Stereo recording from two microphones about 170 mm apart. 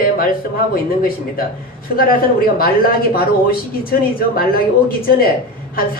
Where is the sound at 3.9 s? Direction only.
60° left (ahead or behind).